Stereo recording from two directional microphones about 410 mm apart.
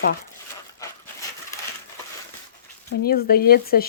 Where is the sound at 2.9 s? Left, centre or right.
Left.